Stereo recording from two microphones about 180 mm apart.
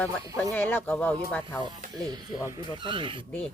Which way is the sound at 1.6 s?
20° right (ahead or behind).